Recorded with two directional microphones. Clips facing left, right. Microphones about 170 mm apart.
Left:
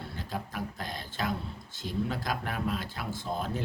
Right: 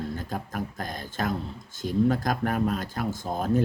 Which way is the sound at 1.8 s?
45° right (ahead or behind).